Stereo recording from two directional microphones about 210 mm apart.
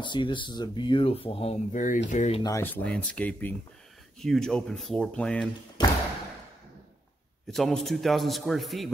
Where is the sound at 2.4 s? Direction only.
15° left (ahead or behind).